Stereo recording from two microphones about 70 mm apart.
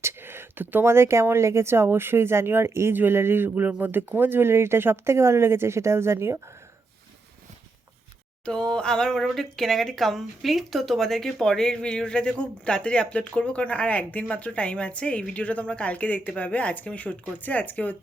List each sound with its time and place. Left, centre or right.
0.0 s speech: right
8.4 s speech: centre